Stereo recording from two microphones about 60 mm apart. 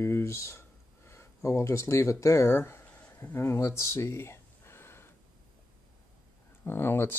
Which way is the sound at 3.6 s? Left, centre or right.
Left.